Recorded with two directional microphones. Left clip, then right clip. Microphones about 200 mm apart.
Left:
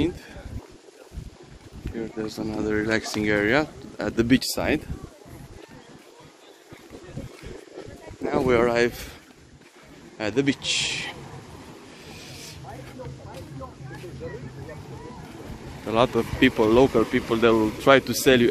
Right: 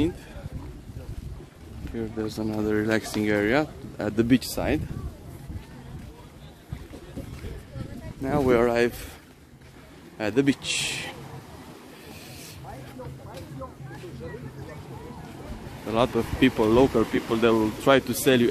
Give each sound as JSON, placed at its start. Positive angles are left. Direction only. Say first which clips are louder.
{"t": 2.0, "sound": "speech", "louder": "even", "side_deg": -25}
{"t": 3.2, "sound": "speech", "louder": "left 2 dB", "side_deg": -10}
{"t": 8.3, "sound": "speech", "louder": "left 1 dB", "side_deg": -20}
{"t": 10.1, "sound": "speech", "louder": "even", "side_deg": -25}
{"t": 15.8, "sound": "speech", "louder": "left 3 dB", "side_deg": 0}